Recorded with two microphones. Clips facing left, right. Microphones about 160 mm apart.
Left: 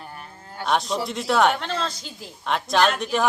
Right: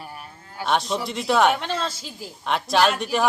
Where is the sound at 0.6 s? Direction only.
Centre (ahead or behind).